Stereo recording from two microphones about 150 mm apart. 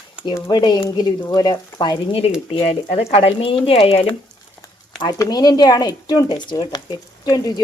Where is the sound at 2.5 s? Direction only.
40° left (ahead or behind).